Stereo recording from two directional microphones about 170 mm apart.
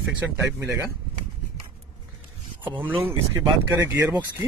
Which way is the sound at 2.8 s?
10° right (ahead or behind).